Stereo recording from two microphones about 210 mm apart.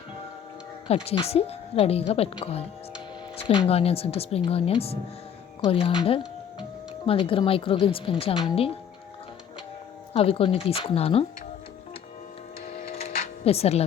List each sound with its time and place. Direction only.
1.0 s speech: 30° left (ahead or behind)
3.3 s music: 20° left (ahead or behind)
3.7 s speech: 30° left (ahead or behind)
6.1 s music: 25° left (ahead or behind)
7.1 s speech: 25° left (ahead or behind)
10.1 s speech: 25° left (ahead or behind)
12.6 s music: 30° left (ahead or behind)